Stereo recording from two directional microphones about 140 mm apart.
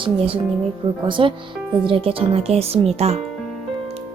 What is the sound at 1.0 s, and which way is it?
A woman's voice, 35° right (ahead or behind).